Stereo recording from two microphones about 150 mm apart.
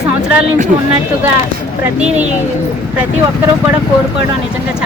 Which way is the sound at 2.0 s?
5° right (ahead or behind).